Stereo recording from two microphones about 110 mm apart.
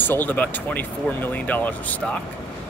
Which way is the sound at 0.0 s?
15° left (ahead or behind).